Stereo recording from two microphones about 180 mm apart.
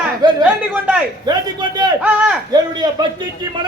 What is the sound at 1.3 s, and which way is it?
A man's voice, 25° right (ahead or behind).